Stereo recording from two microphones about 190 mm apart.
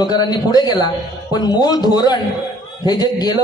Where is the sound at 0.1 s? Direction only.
20° left (ahead or behind).